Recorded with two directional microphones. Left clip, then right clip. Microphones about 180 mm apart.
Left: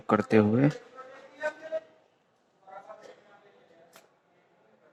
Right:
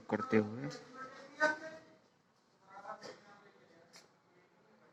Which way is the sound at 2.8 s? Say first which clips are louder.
Left 1 dB; 30° left (ahead or behind).